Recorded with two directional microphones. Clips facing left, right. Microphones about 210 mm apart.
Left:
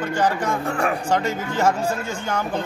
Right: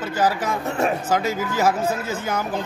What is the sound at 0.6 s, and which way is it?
Speech, 20° right (ahead or behind).